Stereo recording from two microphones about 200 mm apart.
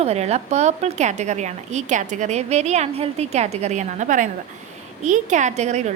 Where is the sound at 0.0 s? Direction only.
30° right (ahead or behind).